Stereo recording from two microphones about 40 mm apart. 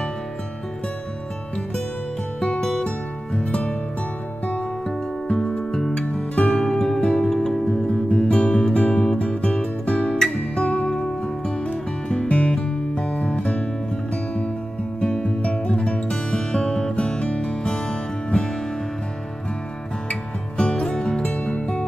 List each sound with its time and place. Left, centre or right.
2.4 s music: left
4.8 s music: centre
6.0 s music: left
6.6 s music: centre
7.0 s music: left
7.2 s music: centre
15.0 s music: left
20.1 s music: left